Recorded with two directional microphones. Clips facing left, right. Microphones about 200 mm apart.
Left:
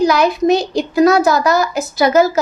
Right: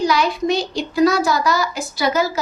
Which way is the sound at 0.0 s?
45° left (ahead or behind).